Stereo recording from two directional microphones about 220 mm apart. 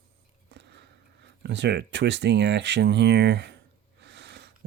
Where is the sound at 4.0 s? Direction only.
50° right (ahead or behind).